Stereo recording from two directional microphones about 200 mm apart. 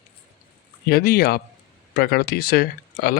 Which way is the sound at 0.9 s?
50° left (ahead or behind).